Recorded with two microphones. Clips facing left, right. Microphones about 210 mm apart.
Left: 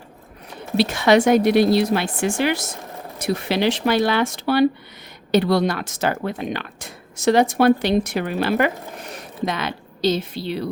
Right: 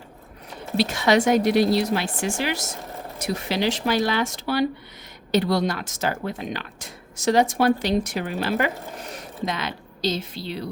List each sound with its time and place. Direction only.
0.8 s speech: 60° left (ahead or behind)